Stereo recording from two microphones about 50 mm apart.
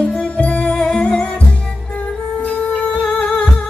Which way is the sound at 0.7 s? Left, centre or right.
Centre.